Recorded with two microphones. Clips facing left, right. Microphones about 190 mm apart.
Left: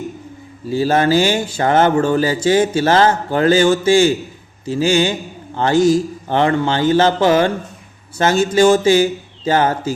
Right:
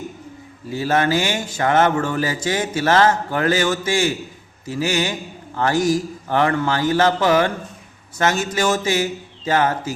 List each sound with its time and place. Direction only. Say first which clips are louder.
0.7 s speech: left 5 dB; 30° left (ahead or behind)